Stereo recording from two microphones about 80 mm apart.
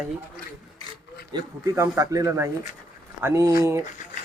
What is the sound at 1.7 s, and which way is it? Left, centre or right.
Speech, right.